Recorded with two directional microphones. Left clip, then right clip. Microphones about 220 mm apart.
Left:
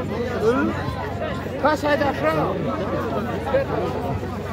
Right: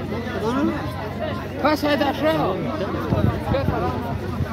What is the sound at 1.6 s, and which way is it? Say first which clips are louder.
Speech: even; 45° right (ahead or behind).